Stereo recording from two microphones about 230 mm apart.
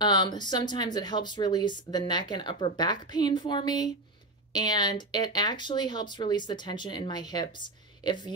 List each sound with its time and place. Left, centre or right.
0.0 s speech: centre